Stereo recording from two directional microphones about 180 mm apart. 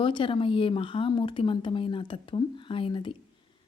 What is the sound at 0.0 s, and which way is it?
A woman's voice, 30° left (ahead or behind).